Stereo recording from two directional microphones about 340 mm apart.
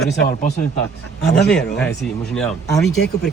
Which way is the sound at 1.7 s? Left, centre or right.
Centre.